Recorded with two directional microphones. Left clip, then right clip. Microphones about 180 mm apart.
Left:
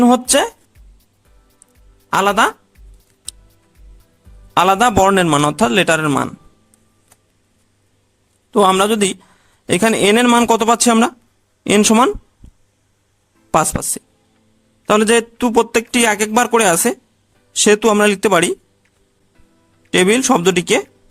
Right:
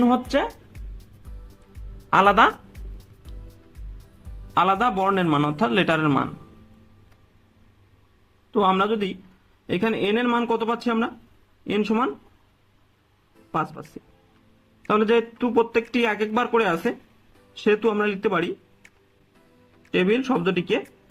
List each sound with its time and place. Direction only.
0.0 s a man's voice: 50° left (ahead or behind)
2.0 s a woman's voice: 30° left (ahead or behind)
4.5 s a man's voice: 50° left (ahead or behind)
8.4 s a man's voice: 60° left (ahead or behind); by 12.1 s 80° left
14.8 s a man's voice: 65° left (ahead or behind)
19.9 s a man's voice: 80° left